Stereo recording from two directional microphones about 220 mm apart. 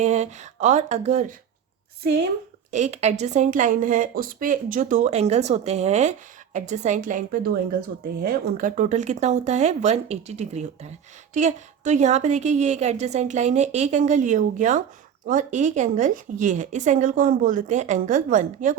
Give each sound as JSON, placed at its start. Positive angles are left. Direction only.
{"t": 0.0, "sound": "a woman's voice", "side_deg": -30}
{"t": 2.7, "sound": "a woman's voice", "side_deg": -30}